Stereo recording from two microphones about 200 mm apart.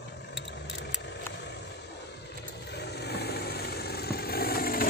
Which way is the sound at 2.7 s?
55° left (ahead or behind).